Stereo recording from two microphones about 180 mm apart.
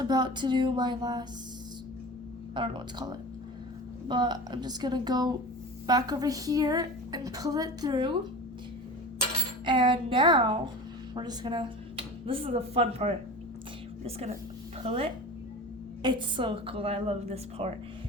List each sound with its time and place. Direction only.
0.0 s a woman's voice: 25° right (ahead or behind)
2.6 s a woman's voice: 25° right (ahead or behind)
9.6 s a woman's voice: 25° right (ahead or behind)
16.0 s a woman's voice: 25° right (ahead or behind)